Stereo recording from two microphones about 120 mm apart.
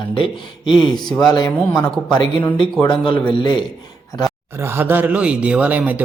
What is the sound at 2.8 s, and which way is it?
Speech, 40° left (ahead or behind).